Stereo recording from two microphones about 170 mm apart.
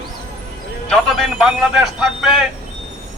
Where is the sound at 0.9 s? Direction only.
Centre (ahead or behind).